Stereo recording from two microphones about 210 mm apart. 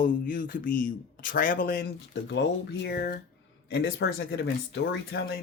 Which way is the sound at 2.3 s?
55° left (ahead or behind).